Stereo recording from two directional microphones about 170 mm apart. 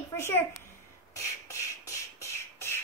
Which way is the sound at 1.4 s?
15° left (ahead or behind).